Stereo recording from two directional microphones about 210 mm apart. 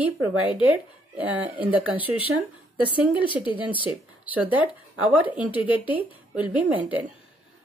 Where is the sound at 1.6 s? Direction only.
5° right (ahead or behind).